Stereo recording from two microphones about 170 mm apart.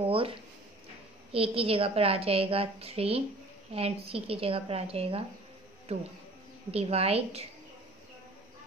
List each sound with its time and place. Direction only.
0.0 s a woman's voice: 35° right (ahead or behind)
6.7 s a woman's voice: 35° right (ahead or behind)